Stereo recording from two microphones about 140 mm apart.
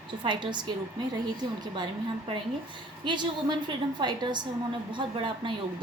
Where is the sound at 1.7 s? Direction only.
35° right (ahead or behind).